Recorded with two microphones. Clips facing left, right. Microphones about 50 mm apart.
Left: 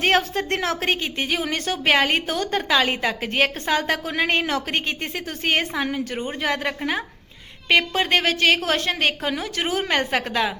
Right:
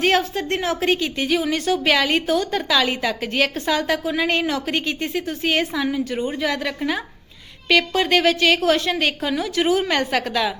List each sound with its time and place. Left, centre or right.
0.0 s a woman's voice: left
0.9 s a woman's voice: left